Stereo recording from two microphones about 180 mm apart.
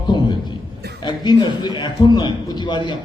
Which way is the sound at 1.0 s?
25° left (ahead or behind).